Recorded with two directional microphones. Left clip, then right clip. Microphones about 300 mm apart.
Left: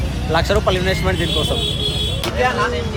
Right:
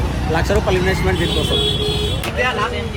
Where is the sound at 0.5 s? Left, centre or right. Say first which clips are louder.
Even; centre.